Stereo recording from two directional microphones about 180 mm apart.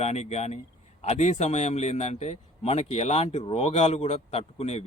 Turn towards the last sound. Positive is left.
turn(degrees=35)  # may be behind; listen again after turning